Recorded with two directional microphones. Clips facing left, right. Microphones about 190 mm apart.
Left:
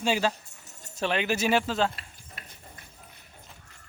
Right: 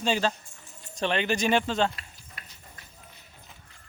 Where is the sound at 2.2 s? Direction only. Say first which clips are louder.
Left 2 dB; 55° left (ahead or behind).